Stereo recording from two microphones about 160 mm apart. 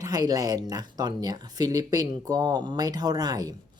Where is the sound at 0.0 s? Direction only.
25° right (ahead or behind).